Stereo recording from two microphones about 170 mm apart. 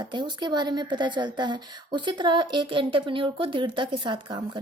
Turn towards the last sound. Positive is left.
turn(degrees=-25)  # may be behind; listen again after turning